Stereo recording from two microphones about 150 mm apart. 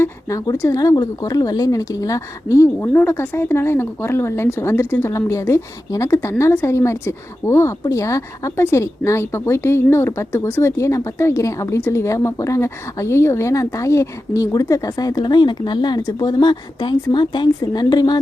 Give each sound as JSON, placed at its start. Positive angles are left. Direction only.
{"t": 0.0, "sound": "a woman's voice", "side_deg": 20}